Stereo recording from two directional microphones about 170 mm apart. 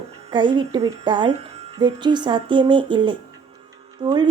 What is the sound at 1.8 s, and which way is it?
Speech, 25° right (ahead or behind).